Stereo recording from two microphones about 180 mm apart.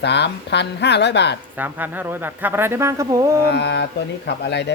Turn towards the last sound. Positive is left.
turn(degrees=70)  # may be behind; listen again after turning